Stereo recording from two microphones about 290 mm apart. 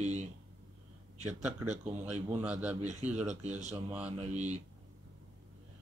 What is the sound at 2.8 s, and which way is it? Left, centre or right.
Speech, right.